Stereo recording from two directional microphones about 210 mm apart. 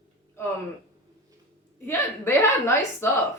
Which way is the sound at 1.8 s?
10° left (ahead or behind).